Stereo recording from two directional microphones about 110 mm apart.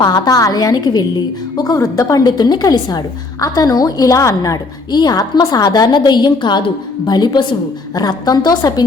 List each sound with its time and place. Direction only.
0.0 s a woman's voice: 35° left (ahead or behind)